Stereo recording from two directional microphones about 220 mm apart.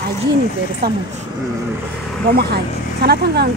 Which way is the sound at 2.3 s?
45° right (ahead or behind).